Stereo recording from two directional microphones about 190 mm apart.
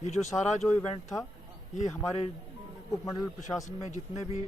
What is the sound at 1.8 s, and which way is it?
Speech, 35° left (ahead or behind).